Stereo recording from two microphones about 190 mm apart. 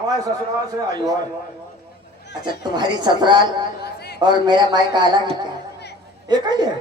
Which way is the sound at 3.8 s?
55° left (ahead or behind).